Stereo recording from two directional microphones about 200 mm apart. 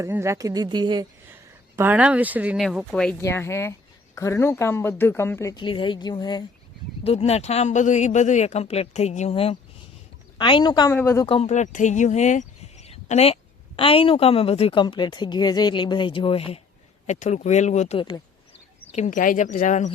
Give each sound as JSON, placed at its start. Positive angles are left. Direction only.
{"t": 0.0, "sound": "speech", "side_deg": -15}
{"t": 1.3, "sound": "speech", "side_deg": -10}
{"t": 7.0, "sound": "speech", "side_deg": 30}
{"t": 11.3, "sound": "speech", "side_deg": 30}
{"t": 18.9, "sound": "speech", "side_deg": 35}